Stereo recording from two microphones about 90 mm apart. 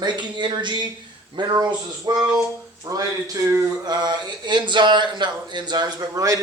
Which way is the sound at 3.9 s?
50° right (ahead or behind).